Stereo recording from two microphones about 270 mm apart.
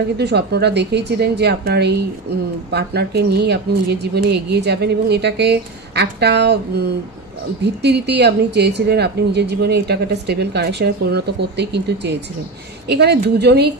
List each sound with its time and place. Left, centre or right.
0.2 s a woman's voice: right